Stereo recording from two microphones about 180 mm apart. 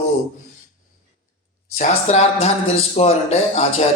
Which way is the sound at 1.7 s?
40° left (ahead or behind).